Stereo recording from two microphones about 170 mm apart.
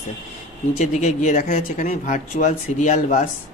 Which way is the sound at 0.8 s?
45° left (ahead or behind).